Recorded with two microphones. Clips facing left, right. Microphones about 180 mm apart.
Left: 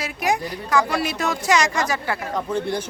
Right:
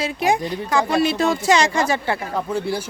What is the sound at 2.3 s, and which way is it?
Speech, 5° right (ahead or behind).